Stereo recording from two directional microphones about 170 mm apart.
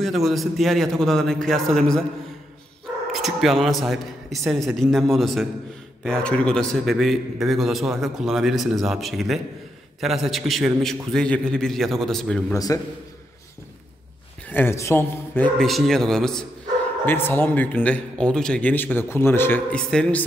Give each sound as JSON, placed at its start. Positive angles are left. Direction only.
{"t": 0.0, "sound": "a man's voice", "side_deg": 0}
{"t": 3.1, "sound": "a man's voice", "side_deg": 0}
{"t": 12.5, "sound": "a man's voice", "side_deg": 20}
{"t": 14.5, "sound": "a man's voice", "side_deg": 15}
{"t": 15.6, "sound": "a man's voice", "side_deg": 0}